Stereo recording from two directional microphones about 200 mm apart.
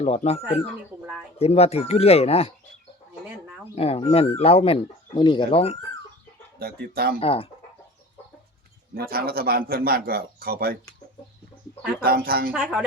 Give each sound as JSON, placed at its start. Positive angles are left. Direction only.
{"t": 0.0, "sound": "speech", "side_deg": 30}
{"t": 1.4, "sound": "speech", "side_deg": 30}
{"t": 3.8, "sound": "speech", "side_deg": 30}
{"t": 6.6, "sound": "a man's voice", "side_deg": -50}
{"t": 7.2, "sound": "speech", "side_deg": 30}
{"t": 9.0, "sound": "a man's voice", "side_deg": -50}
{"t": 12.0, "sound": "a man's voice", "side_deg": -50}
{"t": 12.5, "sound": "a woman's voice", "side_deg": -5}